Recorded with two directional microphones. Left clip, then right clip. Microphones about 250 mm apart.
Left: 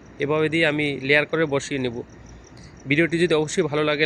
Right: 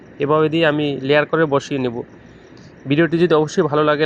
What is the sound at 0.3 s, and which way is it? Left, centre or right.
Speech, centre.